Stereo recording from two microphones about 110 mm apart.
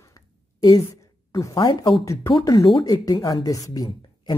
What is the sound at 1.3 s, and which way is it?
Speech, 35° left (ahead or behind).